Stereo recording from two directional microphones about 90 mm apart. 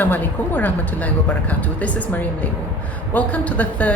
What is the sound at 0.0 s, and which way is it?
A woman's voice, 20° left (ahead or behind).